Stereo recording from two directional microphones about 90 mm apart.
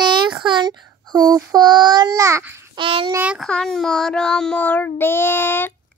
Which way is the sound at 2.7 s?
75° right (ahead or behind).